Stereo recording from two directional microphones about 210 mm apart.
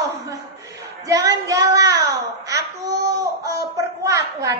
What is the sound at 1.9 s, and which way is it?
Babbling, 55° right (ahead or behind).